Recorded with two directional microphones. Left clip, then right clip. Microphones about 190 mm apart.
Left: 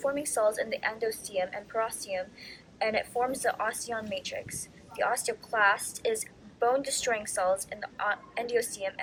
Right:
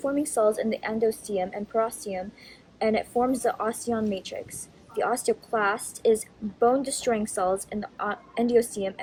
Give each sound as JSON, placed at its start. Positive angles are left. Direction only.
{"t": 0.2, "sound": "a woman's voice", "side_deg": -35}